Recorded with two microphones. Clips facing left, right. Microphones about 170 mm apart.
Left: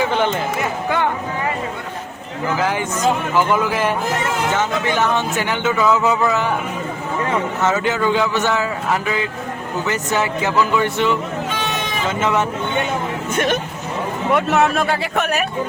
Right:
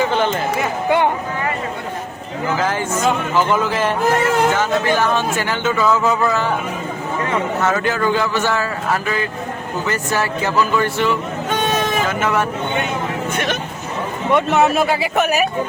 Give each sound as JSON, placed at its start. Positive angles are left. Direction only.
{"t": 0.9, "sound": "speech", "side_deg": -20}
{"t": 2.6, "sound": "a man's voice", "side_deg": 10}
{"t": 7.6, "sound": "a man's voice", "side_deg": 20}
{"t": 11.4, "sound": "vehicle", "side_deg": -50}
{"t": 12.2, "sound": "speech", "side_deg": 20}
{"t": 14.3, "sound": "speech", "side_deg": 0}